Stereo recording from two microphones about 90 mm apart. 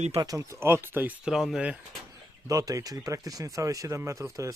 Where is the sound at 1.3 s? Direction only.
5° right (ahead or behind).